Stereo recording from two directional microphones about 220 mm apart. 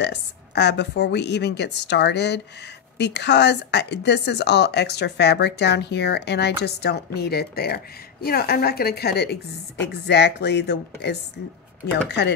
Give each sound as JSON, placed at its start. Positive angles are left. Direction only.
{"t": 0.0, "sound": "a woman's voice", "side_deg": 50}
{"t": 12.2, "sound": "a woman's voice", "side_deg": 50}